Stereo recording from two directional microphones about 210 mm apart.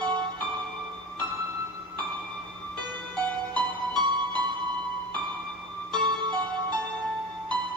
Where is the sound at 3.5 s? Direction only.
20° right (ahead or behind).